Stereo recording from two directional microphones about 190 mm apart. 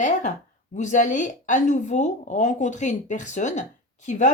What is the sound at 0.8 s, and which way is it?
A woman's voice, 40° left (ahead or behind).